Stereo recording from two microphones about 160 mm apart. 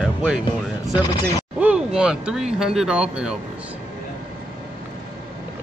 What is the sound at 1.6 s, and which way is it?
Speech, 5° right (ahead or behind).